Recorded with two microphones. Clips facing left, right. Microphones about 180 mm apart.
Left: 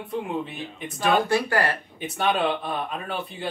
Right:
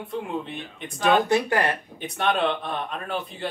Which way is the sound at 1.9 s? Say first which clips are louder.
Left 1 dB; centre (ahead or behind).